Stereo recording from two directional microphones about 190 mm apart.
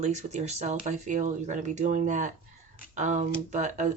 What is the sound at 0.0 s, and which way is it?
A woman's voice, 35° right (ahead or behind).